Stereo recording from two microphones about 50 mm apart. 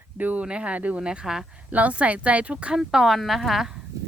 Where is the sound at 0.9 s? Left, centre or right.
Centre.